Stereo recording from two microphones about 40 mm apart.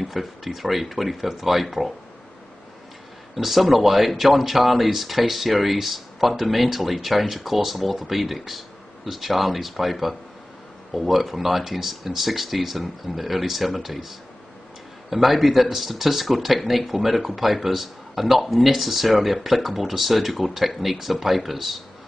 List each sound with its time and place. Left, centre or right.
0.0 s speech: centre
3.3 s speech: centre